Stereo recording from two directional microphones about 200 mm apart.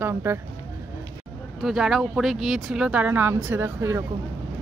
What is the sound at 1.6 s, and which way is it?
Speech, centre (ahead or behind).